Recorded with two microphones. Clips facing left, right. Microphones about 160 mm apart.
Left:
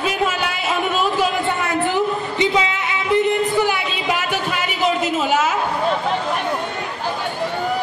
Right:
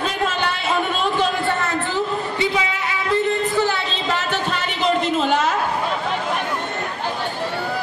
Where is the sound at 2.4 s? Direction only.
20° left (ahead or behind).